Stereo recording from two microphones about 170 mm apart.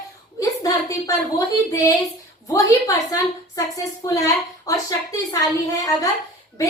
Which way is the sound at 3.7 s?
20° left (ahead or behind).